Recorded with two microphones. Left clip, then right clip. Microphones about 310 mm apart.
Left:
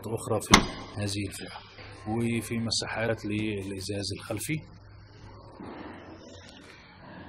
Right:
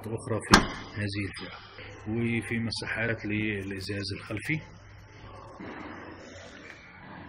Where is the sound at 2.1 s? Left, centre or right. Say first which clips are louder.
Right 1 dB; left.